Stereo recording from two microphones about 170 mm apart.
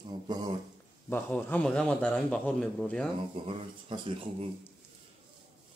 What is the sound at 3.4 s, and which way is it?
Speech, 35° right (ahead or behind).